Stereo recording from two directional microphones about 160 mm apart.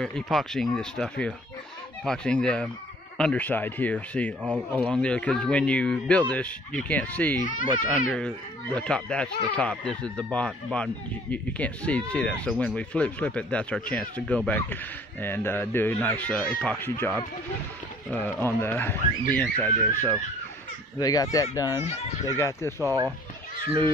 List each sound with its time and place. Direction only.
0.0 s speech: 5° left (ahead or behind)
7.4 s speech: 55° left (ahead or behind)
8.7 s speech: 5° left (ahead or behind)
18.1 s speech: 10° left (ahead or behind)
21.0 s speech: 20° left (ahead or behind)
22.8 s speech: 15° right (ahead or behind)